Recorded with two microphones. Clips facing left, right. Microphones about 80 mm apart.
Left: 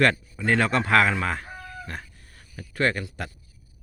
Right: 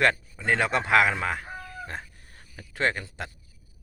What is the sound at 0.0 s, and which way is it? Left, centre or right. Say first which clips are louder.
Speech: left 2 dB; centre.